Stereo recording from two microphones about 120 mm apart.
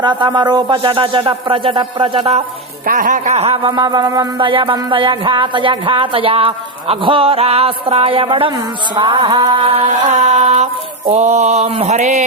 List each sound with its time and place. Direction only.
0.0 s a woman's voice: 40° right (ahead or behind)
3.0 s music: 90° right; by 3.7 s 55° right (ahead or behind)
3.7 s music: 35° right (ahead or behind)
4.4 s a woman's voice: 45° right (ahead or behind)
9.0 s music: 40° right (ahead or behind)
10.4 s a sound: 70° right (ahead or behind)
11.1 s mantra: 65° right (ahead or behind)